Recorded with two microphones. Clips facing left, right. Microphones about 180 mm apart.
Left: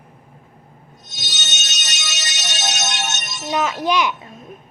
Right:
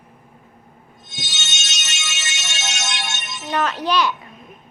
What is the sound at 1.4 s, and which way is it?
Music, 40° left (ahead or behind).